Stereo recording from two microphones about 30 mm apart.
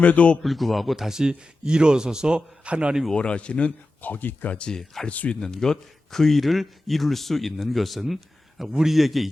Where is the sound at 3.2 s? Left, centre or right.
Left.